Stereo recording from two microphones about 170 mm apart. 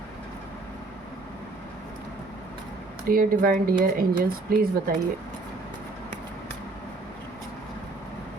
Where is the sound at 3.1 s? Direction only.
55° right (ahead or behind).